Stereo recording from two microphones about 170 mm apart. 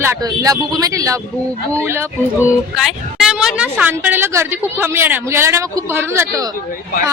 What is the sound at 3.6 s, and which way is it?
A woman's voice, 10° right (ahead or behind).